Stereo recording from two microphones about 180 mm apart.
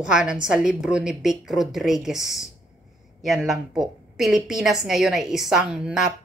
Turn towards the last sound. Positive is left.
turn(degrees=-5)  # may be behind; listen again after turning